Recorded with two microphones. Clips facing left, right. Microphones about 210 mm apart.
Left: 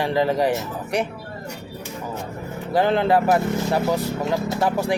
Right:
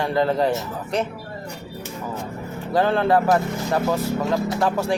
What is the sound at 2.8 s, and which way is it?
Speech, 15° left (ahead or behind).